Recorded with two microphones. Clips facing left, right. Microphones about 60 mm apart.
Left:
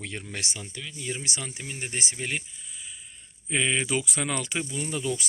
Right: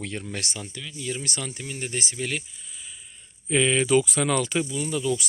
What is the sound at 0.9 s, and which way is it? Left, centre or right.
Speech, left.